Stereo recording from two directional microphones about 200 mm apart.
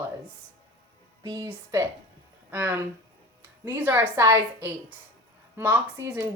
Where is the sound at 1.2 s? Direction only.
20° right (ahead or behind).